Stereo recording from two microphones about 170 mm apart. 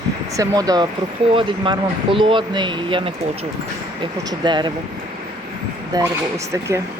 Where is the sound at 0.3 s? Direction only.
20° right (ahead or behind).